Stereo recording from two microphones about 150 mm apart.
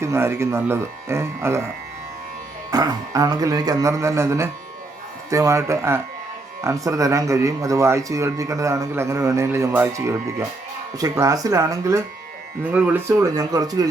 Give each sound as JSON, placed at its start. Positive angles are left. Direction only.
{"t": 0.0, "sound": "speech", "side_deg": -15}
{"t": 2.6, "sound": "speech", "side_deg": -25}
{"t": 12.6, "sound": "speech", "side_deg": -10}